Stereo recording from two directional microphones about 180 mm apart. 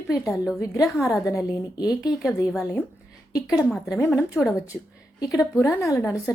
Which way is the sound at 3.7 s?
Centre (ahead or behind).